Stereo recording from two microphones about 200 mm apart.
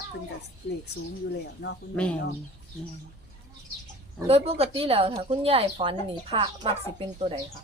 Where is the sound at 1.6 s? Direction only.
60° left (ahead or behind).